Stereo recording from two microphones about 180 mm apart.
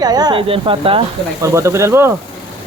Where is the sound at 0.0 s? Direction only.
20° right (ahead or behind).